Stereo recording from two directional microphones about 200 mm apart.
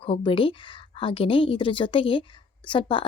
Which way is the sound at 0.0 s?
25° left (ahead or behind).